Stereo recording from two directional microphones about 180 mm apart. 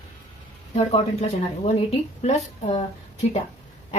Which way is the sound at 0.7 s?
35° left (ahead or behind).